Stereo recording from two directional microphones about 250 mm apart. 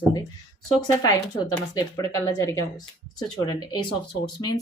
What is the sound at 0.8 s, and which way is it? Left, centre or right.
Speech, centre.